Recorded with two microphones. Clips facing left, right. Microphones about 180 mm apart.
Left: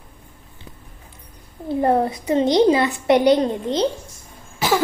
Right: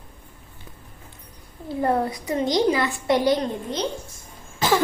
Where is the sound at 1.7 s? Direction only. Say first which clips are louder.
Left 4 dB; 25° left (ahead or behind).